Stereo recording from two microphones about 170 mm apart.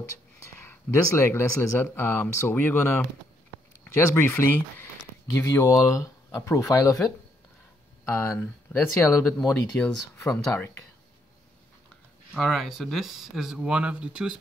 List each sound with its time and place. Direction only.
0.7 s speech: 15° left (ahead or behind)
8.0 s speech: 10° left (ahead or behind)
9.4 s speech: 5° left (ahead or behind)
12.4 s speech: centre (ahead or behind)